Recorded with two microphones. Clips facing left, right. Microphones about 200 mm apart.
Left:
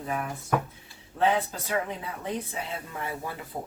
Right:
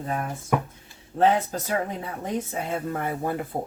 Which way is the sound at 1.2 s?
45° right (ahead or behind).